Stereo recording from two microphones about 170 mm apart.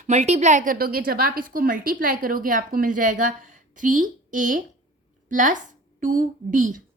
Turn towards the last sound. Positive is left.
turn(degrees=-50)  # may be behind; listen again after turning